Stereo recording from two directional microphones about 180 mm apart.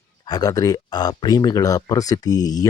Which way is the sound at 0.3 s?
20° left (ahead or behind).